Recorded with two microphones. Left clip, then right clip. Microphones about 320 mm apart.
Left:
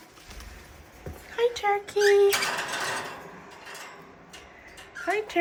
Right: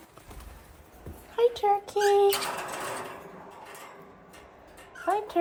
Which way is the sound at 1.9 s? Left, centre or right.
Centre.